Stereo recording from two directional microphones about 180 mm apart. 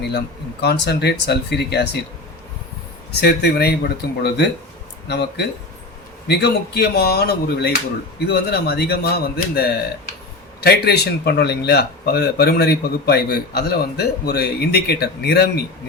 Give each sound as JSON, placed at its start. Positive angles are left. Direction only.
{"t": 0.6, "sound": "speech", "side_deg": 65}
{"t": 3.2, "sound": "speech", "side_deg": 65}